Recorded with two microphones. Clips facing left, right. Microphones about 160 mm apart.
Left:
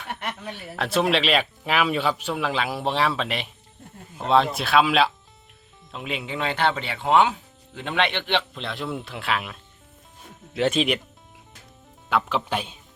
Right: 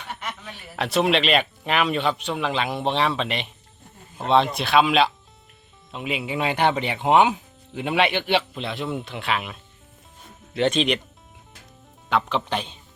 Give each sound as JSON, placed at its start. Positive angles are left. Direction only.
{"t": 0.1, "sound": "a sound", "side_deg": 60}
{"t": 0.8, "sound": "speech", "side_deg": 0}
{"t": 12.0, "sound": "speech", "side_deg": 5}